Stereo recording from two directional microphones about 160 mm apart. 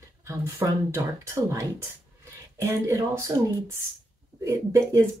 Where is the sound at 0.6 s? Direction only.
20° right (ahead or behind).